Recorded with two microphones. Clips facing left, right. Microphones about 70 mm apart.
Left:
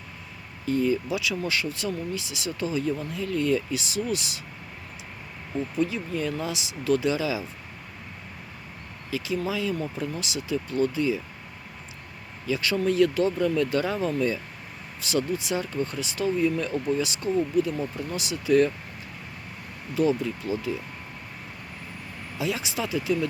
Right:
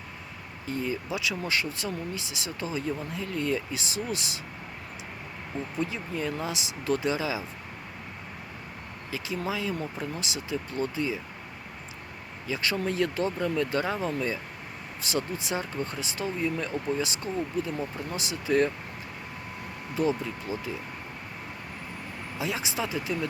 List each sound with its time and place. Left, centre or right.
0.7 s speech: right
5.8 s speech: right
9.0 s speech: right
12.5 s speech: right
20.0 s speech: right
22.4 s speech: right